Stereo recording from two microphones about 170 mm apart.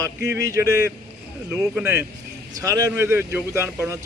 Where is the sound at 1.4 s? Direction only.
5° right (ahead or behind).